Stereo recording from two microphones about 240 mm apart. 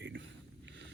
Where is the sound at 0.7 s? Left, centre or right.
Right.